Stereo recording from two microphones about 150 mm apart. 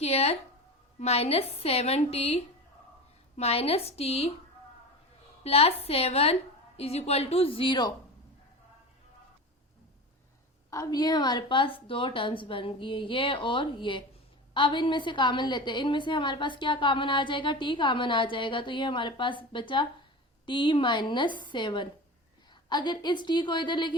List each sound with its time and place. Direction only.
0.0 s a woman's voice: 45° left (ahead or behind)
5.4 s a woman's voice: 40° left (ahead or behind)
10.7 s a woman's voice: 25° left (ahead or behind)